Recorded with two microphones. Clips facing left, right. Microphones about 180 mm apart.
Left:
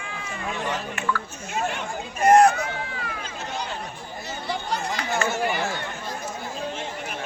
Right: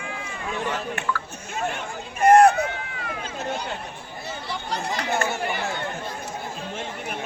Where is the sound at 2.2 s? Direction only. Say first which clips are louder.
Right 1 dB; 55° right (ahead or behind).